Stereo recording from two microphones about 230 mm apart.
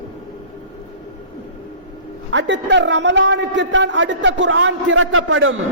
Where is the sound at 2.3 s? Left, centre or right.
Right.